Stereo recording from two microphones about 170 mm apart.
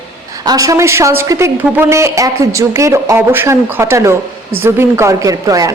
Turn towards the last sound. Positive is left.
turn(degrees=-20)  # may be behind; listen again after turning